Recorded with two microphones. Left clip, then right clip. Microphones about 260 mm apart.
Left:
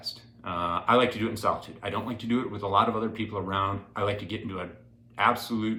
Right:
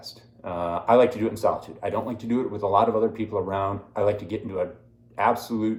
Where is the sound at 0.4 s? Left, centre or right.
Left.